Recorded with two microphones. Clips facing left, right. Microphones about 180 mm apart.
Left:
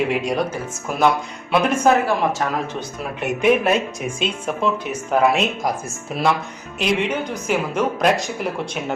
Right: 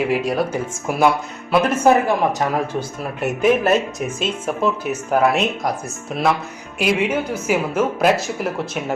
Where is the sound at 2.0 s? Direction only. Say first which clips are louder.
Right 2 dB; 15° right (ahead or behind).